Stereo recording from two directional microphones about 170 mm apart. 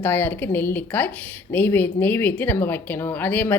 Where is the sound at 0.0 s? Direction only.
10° left (ahead or behind).